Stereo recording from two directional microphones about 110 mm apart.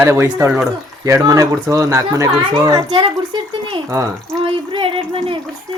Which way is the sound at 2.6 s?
40° right (ahead or behind).